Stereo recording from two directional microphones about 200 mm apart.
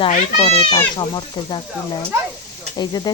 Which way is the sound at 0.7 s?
20° left (ahead or behind).